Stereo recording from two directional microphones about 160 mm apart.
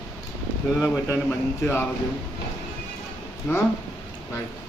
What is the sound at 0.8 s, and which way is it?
Speech, 20° left (ahead or behind).